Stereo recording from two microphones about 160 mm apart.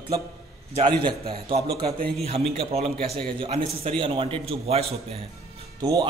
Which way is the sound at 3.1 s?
5° left (ahead or behind).